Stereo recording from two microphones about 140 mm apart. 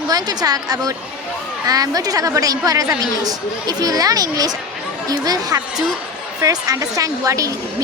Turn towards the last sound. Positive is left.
turn(degrees=-25)  # may be behind; listen again after turning